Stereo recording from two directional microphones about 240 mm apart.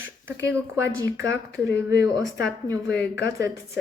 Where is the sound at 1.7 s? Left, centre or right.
Left.